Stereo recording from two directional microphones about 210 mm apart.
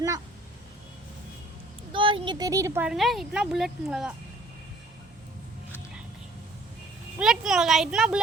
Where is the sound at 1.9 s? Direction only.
25° right (ahead or behind); by 4.1 s 5° right (ahead or behind).